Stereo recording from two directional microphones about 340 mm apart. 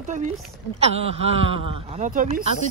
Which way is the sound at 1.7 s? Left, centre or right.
Centre.